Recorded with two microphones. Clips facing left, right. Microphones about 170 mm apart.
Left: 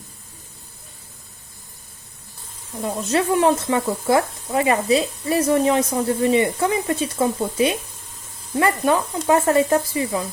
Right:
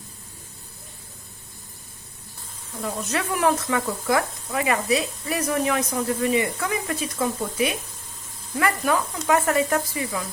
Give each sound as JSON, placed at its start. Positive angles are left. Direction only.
{"t": 2.7, "sound": "speech", "side_deg": 30}